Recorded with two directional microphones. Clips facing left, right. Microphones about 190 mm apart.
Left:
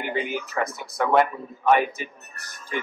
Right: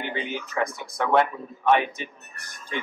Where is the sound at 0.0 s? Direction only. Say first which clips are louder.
Left 3 dB; 5° left (ahead or behind).